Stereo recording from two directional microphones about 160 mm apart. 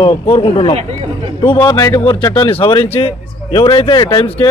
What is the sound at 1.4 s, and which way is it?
A man's voice, 25° left (ahead or behind).